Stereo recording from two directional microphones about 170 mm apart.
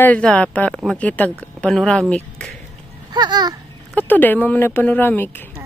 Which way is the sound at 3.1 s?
25° right (ahead or behind).